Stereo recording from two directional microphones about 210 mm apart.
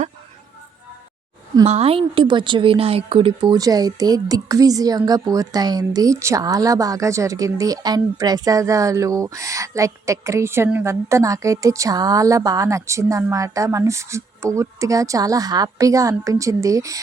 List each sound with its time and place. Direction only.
1.6 s a woman's voice: 30° right (ahead or behind)